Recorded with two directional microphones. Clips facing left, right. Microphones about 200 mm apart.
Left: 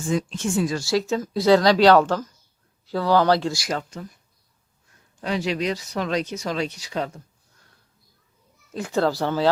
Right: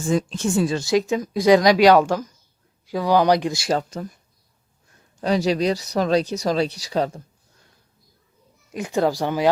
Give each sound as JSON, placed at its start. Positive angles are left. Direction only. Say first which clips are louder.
{"t": 0.1, "sound": "speech", "louder": "right 3 dB", "side_deg": -35}
{"t": 3.7, "sound": "speech", "louder": "right 5 dB", "side_deg": -40}
{"t": 5.2, "sound": "speech", "louder": "right 5 dB", "side_deg": -40}
{"t": 8.7, "sound": "speech", "louder": "right 1 dB", "side_deg": -15}